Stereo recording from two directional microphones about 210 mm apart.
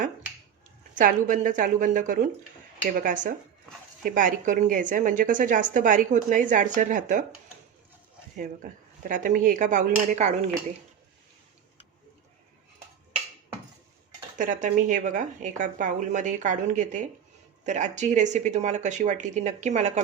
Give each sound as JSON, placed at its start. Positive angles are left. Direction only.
{"t": 0.9, "sound": "a woman's voice", "side_deg": -40}
{"t": 9.0, "sound": "a woman's voice", "side_deg": -40}
{"t": 14.3, "sound": "a woman's voice", "side_deg": -40}